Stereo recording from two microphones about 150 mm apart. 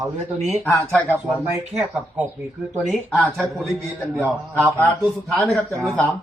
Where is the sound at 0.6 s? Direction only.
10° left (ahead or behind).